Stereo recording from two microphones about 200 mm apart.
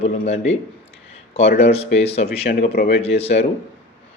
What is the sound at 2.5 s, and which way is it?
Speech, 45° left (ahead or behind).